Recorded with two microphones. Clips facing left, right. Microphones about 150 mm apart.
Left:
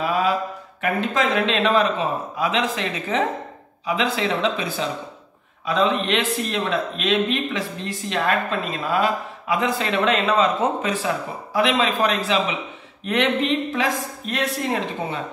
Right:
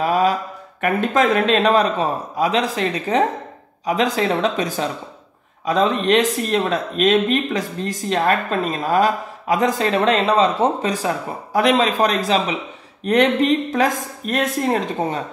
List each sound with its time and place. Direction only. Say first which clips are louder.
0.0 s mantra: right 4 dB; 40° right (ahead or behind)
0.7 s speech: right 4 dB; 50° right (ahead or behind)